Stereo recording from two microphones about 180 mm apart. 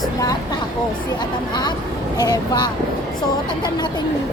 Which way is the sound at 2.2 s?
20° left (ahead or behind).